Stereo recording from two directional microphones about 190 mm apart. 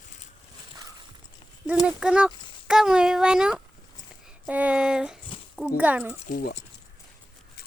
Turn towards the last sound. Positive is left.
turn(degrees=50)  # may be behind; listen again after turning